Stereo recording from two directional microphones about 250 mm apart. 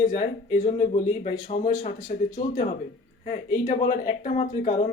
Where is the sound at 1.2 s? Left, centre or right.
Left.